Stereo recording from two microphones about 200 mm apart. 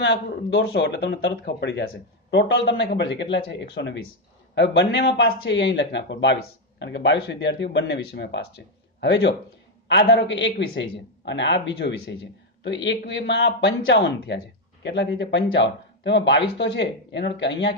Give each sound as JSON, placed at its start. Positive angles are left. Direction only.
{"t": 0.0, "sound": "speech", "side_deg": 60}